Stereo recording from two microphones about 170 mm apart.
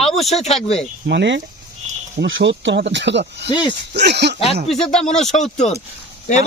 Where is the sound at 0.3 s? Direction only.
40° left (ahead or behind).